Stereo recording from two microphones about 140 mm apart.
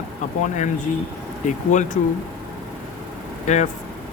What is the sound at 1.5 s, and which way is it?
Speech, 60° left (ahead or behind).